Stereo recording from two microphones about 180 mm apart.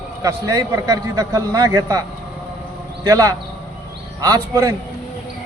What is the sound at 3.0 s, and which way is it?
A man's voice, 20° right (ahead or behind).